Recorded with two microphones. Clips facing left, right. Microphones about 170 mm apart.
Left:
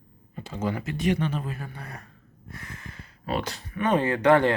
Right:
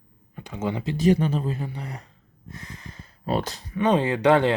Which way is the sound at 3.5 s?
15° right (ahead or behind).